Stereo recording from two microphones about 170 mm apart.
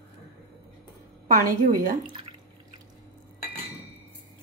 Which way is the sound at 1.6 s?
55° right (ahead or behind).